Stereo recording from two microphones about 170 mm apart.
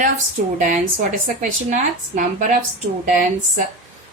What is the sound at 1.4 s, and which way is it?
Speech, 50° right (ahead or behind).